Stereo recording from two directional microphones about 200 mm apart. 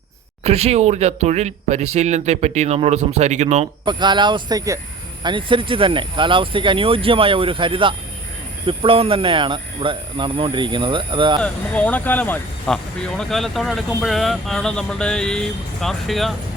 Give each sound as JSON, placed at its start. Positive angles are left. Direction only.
{"t": 0.4, "sound": "speech", "side_deg": -30}
{"t": 3.8, "sound": "speech", "side_deg": -20}
{"t": 11.4, "sound": "speech", "side_deg": 5}